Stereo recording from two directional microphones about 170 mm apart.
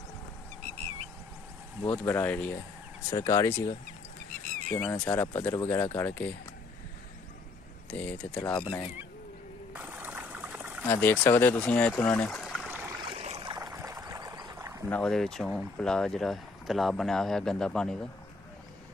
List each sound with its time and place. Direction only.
1.9 s speech: 10° left (ahead or behind)
3.1 s speech: 20° left (ahead or behind)
7.9 s speech: 10° left (ahead or behind)
8.5 s speech: 20° left (ahead or behind)
9.8 s trickle: 10° right (ahead or behind)
10.8 s speech: 10° left (ahead or behind)
13.0 s a sound: 35° right (ahead or behind)
13.5 s rowboat: 20° right (ahead or behind)
14.9 s speech: 5° left (ahead or behind)